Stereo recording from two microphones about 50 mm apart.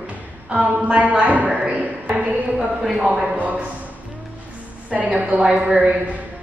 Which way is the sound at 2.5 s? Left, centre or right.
Centre.